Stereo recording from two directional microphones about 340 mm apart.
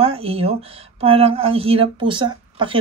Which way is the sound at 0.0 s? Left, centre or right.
Centre.